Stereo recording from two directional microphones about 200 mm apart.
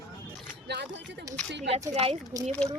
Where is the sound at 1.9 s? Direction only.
30° right (ahead or behind).